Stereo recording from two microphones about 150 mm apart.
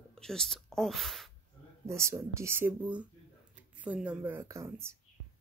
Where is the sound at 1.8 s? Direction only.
20° right (ahead or behind).